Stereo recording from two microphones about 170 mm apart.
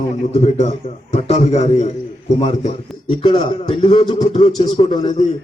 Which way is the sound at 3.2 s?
30° left (ahead or behind).